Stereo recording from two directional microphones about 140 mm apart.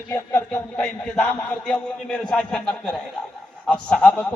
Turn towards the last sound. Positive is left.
turn(degrees=10)  # may be behind; listen again after turning